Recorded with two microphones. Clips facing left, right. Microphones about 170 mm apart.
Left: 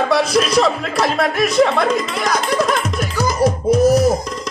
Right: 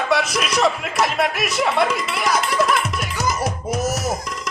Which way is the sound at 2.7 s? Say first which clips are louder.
Left 3 dB; 35° left (ahead or behind).